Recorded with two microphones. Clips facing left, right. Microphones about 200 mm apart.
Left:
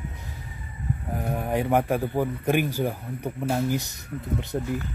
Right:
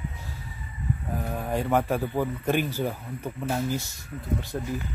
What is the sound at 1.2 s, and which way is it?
A man's voice, 20° left (ahead or behind).